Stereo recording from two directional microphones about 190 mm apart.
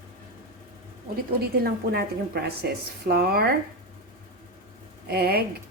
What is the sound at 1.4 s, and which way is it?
A woman's voice, 55° right (ahead or behind).